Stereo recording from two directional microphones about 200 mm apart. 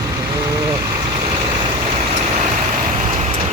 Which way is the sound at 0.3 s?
20° right (ahead or behind).